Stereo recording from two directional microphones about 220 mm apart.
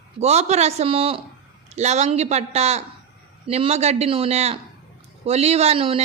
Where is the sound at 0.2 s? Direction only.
30° right (ahead or behind).